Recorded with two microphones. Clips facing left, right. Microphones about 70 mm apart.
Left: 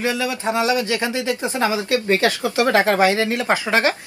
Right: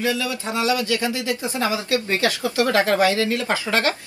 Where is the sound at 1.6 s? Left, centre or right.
Left.